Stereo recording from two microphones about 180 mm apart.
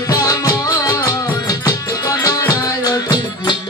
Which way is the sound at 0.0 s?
20° left (ahead or behind).